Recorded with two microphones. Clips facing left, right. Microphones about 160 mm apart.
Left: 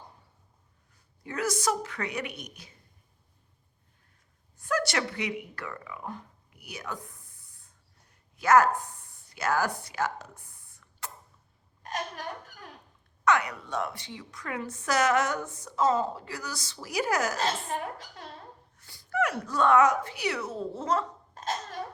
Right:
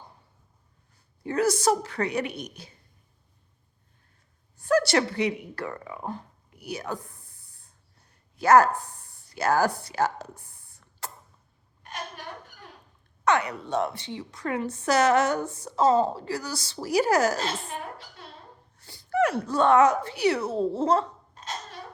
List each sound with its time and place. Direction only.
1.2 s a woman's voice: 30° right (ahead or behind)
4.5 s speech: 30° right (ahead or behind)
11.8 s a sound: 40° left (ahead or behind)
13.2 s a woman's voice: 30° right (ahead or behind)
18.8 s a woman's voice: 30° right (ahead or behind)